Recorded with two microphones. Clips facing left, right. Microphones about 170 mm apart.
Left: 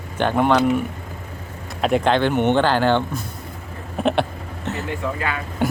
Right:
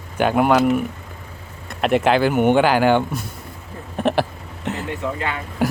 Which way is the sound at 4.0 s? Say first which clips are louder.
Even; centre (ahead or behind).